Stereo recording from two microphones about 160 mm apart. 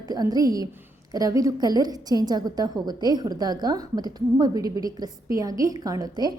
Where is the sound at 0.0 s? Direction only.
25° right (ahead or behind).